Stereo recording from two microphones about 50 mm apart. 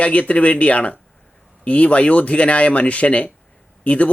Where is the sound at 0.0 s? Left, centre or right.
Left.